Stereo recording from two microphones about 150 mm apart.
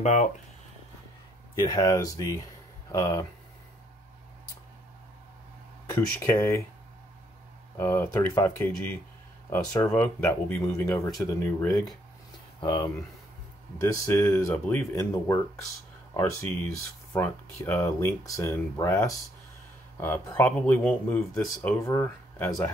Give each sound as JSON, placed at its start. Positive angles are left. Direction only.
{"t": 0.0, "sound": "speech", "side_deg": 50}
{"t": 1.7, "sound": "speech", "side_deg": 25}
{"t": 5.9, "sound": "speech", "side_deg": 20}
{"t": 7.7, "sound": "speech", "side_deg": 15}
{"t": 9.5, "sound": "speech", "side_deg": 25}
{"t": 9.8, "sound": "speech", "side_deg": 10}
{"t": 12.5, "sound": "speech", "side_deg": 30}
{"t": 13.7, "sound": "speech", "side_deg": 15}